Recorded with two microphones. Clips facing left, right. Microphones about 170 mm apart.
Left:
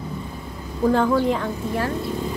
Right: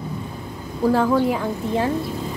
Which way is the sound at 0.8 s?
5° right (ahead or behind).